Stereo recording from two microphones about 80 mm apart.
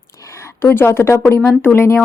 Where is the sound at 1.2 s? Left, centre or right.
Left.